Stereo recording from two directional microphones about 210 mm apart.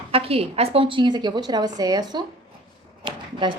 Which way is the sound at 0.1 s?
25° right (ahead or behind).